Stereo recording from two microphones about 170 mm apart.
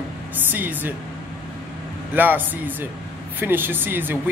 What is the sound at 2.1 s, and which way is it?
A man's voice, 10° right (ahead or behind).